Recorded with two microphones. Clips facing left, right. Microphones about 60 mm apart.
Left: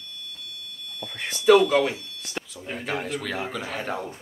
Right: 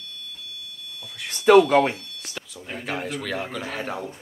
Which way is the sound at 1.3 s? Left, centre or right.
Right.